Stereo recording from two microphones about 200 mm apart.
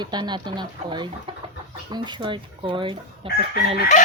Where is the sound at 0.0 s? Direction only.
20° right (ahead or behind).